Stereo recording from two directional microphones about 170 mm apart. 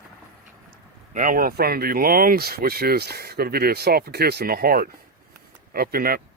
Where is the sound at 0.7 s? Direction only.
55° right (ahead or behind).